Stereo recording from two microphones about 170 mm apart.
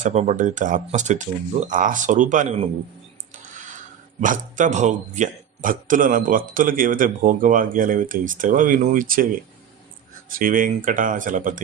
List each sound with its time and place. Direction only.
0.0 s speech: 40° right (ahead or behind)
4.2 s speech: 50° right (ahead or behind)
10.2 s speech: 55° right (ahead or behind)